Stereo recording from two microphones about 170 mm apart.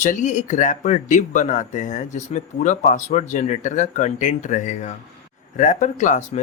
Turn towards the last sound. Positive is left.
turn(degrees=45)  # may be behind; listen again after turning